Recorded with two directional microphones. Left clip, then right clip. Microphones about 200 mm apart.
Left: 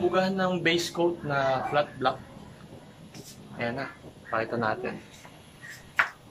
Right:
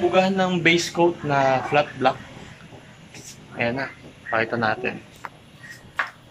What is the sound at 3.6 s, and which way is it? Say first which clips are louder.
Speech: right 7 dB; 10° right (ahead or behind).